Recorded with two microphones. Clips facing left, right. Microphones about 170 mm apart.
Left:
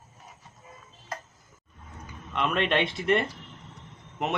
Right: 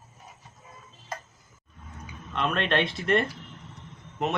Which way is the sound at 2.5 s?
15° left (ahead or behind).